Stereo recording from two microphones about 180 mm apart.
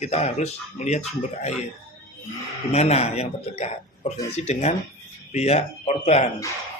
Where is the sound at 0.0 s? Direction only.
35° left (ahead or behind).